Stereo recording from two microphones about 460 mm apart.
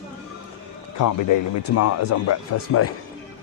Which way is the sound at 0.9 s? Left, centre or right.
Left.